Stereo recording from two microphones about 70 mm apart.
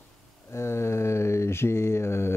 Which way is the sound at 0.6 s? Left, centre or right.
Left.